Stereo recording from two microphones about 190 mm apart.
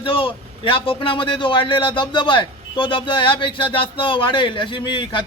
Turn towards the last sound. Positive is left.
turn(degrees=25)  # may be behind; listen again after turning